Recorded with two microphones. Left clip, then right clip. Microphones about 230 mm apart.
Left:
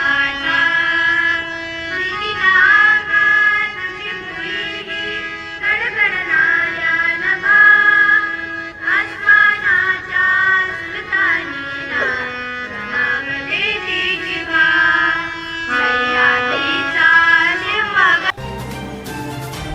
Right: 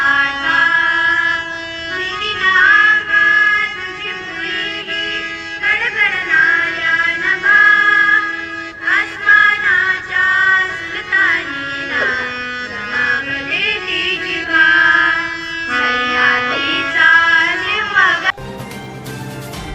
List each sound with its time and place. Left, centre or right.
0.0 s music: right
8.8 s synthetic singing: right
11.1 s music: right; by 18.3 s centre